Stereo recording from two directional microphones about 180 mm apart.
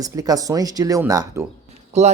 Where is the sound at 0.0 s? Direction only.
20° right (ahead or behind).